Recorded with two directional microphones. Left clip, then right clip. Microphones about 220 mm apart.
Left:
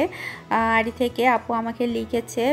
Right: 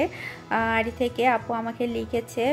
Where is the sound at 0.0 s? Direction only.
5° left (ahead or behind).